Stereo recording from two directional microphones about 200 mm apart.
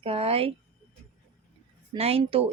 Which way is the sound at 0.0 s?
30° right (ahead or behind).